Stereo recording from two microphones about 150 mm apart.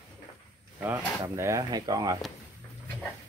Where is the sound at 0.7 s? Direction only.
10° right (ahead or behind).